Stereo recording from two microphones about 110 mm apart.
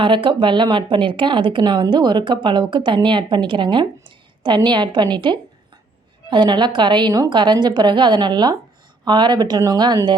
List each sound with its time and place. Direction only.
0.0 s a woman's voice: 50° right (ahead or behind)